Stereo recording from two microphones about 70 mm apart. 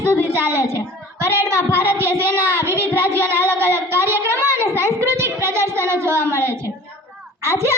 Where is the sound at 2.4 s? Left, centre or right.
Right.